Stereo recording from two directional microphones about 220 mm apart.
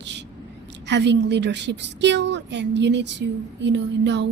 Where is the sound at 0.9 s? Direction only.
50° right (ahead or behind).